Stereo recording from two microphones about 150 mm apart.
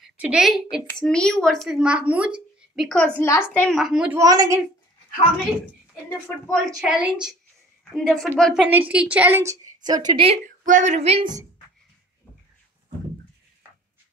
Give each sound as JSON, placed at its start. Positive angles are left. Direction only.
{"t": 0.2, "sound": "a woman's voice", "side_deg": -5}
{"t": 3.8, "sound": "a woman's voice", "side_deg": -5}
{"t": 4.2, "sound": "a woman's voice", "side_deg": -25}
{"t": 6.0, "sound": "a woman's voice", "side_deg": 5}
{"t": 6.8, "sound": "a woman's voice", "side_deg": -5}
{"t": 8.6, "sound": "a woman's voice", "side_deg": -10}
{"t": 10.4, "sound": "speech", "side_deg": -60}